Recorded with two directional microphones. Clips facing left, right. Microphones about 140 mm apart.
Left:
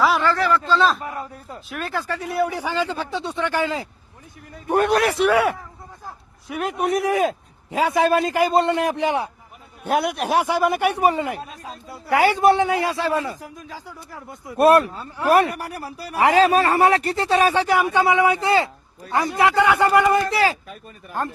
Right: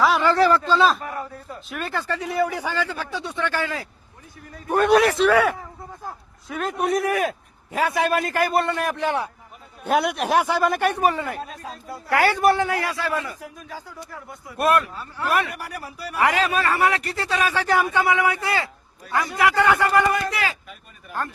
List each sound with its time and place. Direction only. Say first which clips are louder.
0.0 s a sound: even; centre (ahead or behind)
0.3 s speech: right 3 dB; 30° right (ahead or behind)
0.7 s a man's voice: even; centre (ahead or behind)
1.0 s speech: even; 20° left (ahead or behind)
1.7 s a man's voice: left 1 dB; centre (ahead or behind)
2.4 s speech: left 2 dB; 15° left (ahead or behind)
4.9 s a man's voice: right 6 dB; centre (ahead or behind)
5.1 s a man's voice: even; 15° left (ahead or behind)
7.9 s speech: left 5 dB; 25° left (ahead or behind)
9.8 s a man's voice: even; centre (ahead or behind)
10.5 s speech: left 1 dB; 10° left (ahead or behind)
14.4 s speech: left 6 dB; 30° left (ahead or behind)
20.1 s speech: left 6 dB; 35° left (ahead or behind)